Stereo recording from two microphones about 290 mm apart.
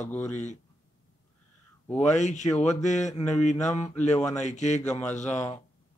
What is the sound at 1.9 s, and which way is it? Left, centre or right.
A man's voice, left.